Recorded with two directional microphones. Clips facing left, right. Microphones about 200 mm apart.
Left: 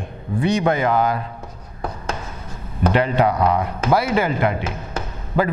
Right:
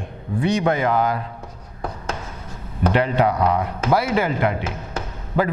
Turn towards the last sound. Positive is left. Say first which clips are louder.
# left 1 dB
turn(degrees=15)  # may be behind; listen again after turning